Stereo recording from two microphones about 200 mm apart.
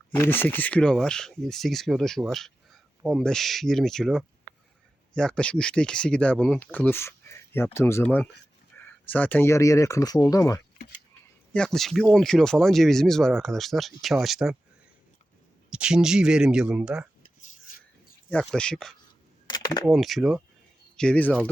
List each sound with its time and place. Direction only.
0.2 s speech: 10° left (ahead or behind)
8.7 s a sound: 5° left (ahead or behind)
9.0 s speech: 10° left (ahead or behind)
10.8 s a sound: 40° left (ahead or behind)
11.5 s speech: 5° left (ahead or behind)
15.7 s speech: 5° right (ahead or behind)
18.3 s speech: 5° left (ahead or behind)
19.5 s a sound: 20° left (ahead or behind)
19.8 s speech: centre (ahead or behind)